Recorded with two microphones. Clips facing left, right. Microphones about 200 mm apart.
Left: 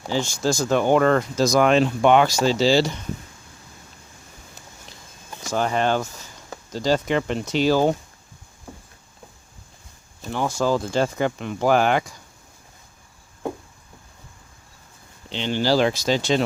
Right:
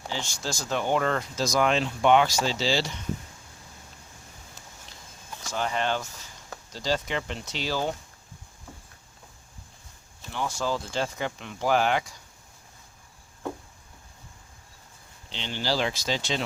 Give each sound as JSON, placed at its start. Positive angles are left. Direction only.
{"t": 0.1, "sound": "speech", "side_deg": 50}
{"t": 5.5, "sound": "speech", "side_deg": 45}
{"t": 10.3, "sound": "speech", "side_deg": 45}
{"t": 15.3, "sound": "speech", "side_deg": 55}